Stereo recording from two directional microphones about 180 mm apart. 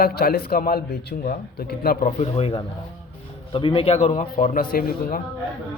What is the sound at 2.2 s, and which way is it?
A man's voice, 35° left (ahead or behind).